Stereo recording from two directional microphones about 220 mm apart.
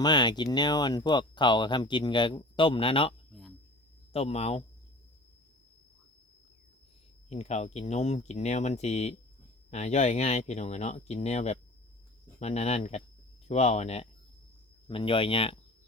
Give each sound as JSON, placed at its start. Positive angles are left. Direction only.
{"t": 0.0, "sound": "speech", "side_deg": 20}
{"t": 7.3, "sound": "speech", "side_deg": 30}